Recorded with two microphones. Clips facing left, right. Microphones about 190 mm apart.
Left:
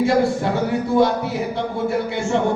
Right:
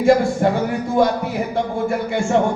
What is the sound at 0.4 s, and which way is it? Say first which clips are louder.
Speech: right 2 dB; 50° right (ahead or behind).